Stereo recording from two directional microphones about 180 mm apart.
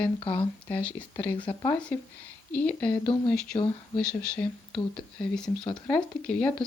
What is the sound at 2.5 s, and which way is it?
Speech, 10° left (ahead or behind).